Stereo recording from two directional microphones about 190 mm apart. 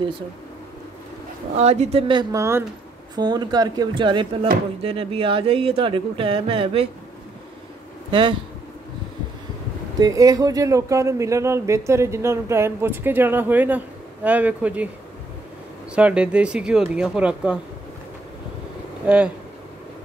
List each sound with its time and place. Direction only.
1.6 s speech: 35° right (ahead or behind)
8.1 s speech: 25° right (ahead or behind)
9.9 s a man's voice: 20° right (ahead or behind)
15.9 s speech: 5° right (ahead or behind)
19.0 s speech: 5° right (ahead or behind)